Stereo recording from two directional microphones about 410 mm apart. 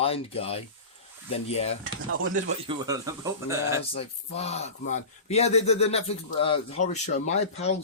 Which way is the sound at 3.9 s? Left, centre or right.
Centre.